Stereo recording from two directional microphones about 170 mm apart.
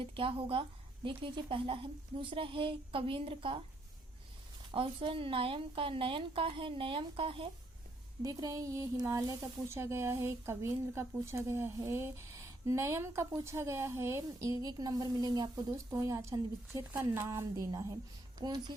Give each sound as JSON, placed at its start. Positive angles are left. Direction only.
{"t": 0.0, "sound": "a woman's voice", "side_deg": -30}
{"t": 4.7, "sound": "a woman's voice", "side_deg": -30}
{"t": 8.2, "sound": "a woman's voice", "side_deg": -20}